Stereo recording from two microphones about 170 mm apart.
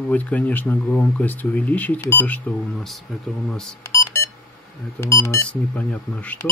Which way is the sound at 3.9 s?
15° left (ahead or behind).